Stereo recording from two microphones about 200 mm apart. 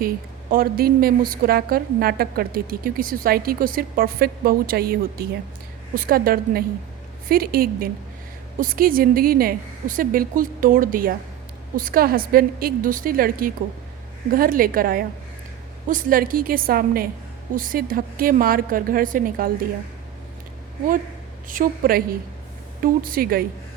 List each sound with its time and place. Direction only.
0.5 s a woman's voice: 50° right (ahead or behind)
21.4 s a woman's voice: 45° right (ahead or behind)